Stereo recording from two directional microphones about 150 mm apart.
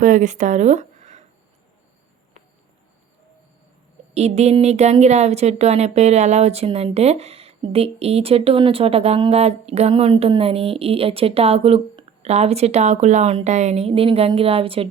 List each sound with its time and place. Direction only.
0.0 s speech: 55° right (ahead or behind)
4.1 s speech: 45° right (ahead or behind)